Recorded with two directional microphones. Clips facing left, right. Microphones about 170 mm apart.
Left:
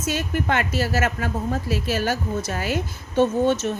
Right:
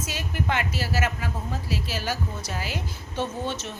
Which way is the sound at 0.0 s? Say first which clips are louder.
Left 6 dB; 50° left (ahead or behind).